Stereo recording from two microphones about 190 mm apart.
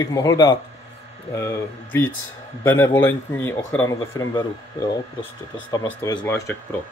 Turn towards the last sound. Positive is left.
turn(degrees=15)  # may be behind; listen again after turning